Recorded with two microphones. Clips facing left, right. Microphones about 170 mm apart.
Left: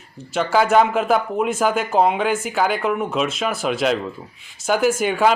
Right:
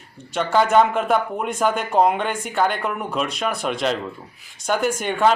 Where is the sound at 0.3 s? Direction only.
5° left (ahead or behind).